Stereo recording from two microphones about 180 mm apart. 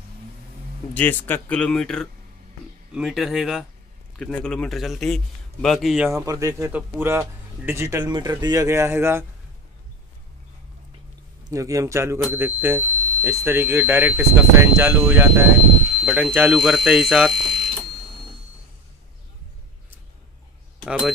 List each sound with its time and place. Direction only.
0.9 s a man's voice: 10° left (ahead or behind)
6.0 s a man's voice: 20° right (ahead or behind)
11.4 s a man's voice: 20° right (ahead or behind); by 17.3 s 5° right (ahead or behind)
20.8 s speech: centre (ahead or behind)